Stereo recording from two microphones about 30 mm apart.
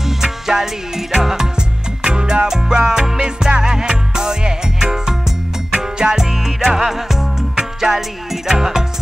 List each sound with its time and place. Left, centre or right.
0.2 s music: centre
2.0 s music: right